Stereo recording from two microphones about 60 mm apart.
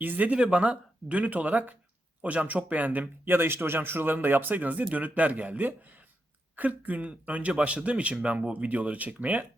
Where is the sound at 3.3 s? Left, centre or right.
Right.